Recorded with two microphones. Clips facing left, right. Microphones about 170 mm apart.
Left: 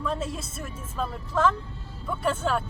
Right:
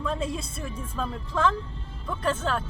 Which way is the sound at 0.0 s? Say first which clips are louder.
Right 1 dB; 5° left (ahead or behind).